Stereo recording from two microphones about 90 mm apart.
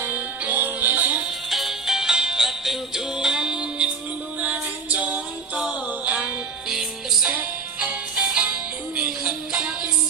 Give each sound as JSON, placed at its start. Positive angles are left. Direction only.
{"t": 0.0, "sound": "music", "side_deg": -20}
{"t": 1.5, "sound": "music", "side_deg": 0}